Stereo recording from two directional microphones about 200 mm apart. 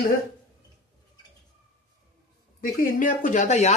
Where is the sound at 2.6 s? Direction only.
45° left (ahead or behind).